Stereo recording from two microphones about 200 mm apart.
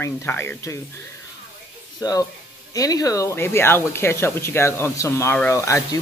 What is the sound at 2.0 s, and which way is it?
Speech, 20° left (ahead or behind).